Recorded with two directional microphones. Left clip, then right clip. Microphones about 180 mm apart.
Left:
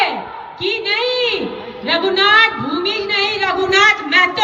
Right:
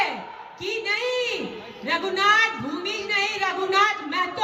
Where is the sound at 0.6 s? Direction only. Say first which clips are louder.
Left 8 dB; 55° right (ahead or behind).